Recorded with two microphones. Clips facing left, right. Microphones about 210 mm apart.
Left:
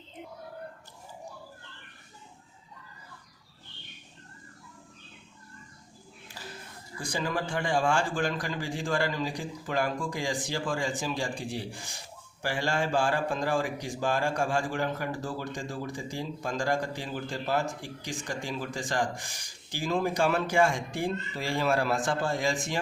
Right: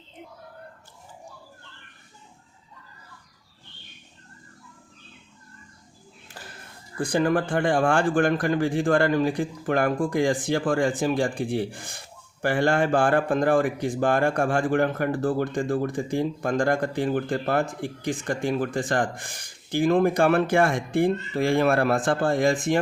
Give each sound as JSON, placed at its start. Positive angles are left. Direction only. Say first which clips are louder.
{"t": 6.4, "sound": "music", "louder": "even", "side_deg": -55}
{"t": 7.0, "sound": "speech", "louder": "right 9 dB", "side_deg": -55}